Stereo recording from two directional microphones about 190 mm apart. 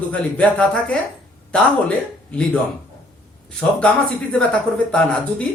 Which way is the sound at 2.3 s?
5° left (ahead or behind).